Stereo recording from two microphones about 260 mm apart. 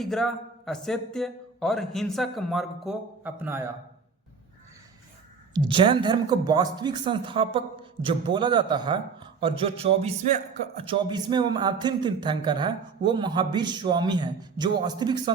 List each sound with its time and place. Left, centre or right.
0.0 s speech: centre
5.5 s a woman's voice: centre